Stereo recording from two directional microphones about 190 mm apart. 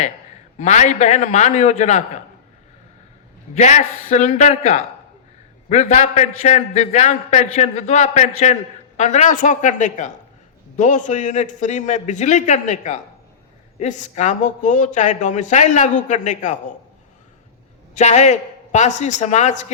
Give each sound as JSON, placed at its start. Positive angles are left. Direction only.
{"t": 0.6, "sound": "speech", "side_deg": 40}
{"t": 3.5, "sound": "speech", "side_deg": 35}
{"t": 17.9, "sound": "speech", "side_deg": 40}